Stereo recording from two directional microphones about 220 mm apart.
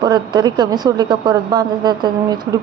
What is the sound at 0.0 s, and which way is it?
A woman's voice, 20° right (ahead or behind).